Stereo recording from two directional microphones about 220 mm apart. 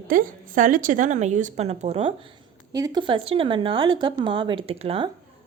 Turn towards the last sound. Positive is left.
turn(degrees=-25)  # may be behind; listen again after turning